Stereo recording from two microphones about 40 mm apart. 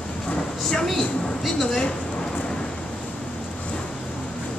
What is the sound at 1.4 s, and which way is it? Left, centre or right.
Speech, centre.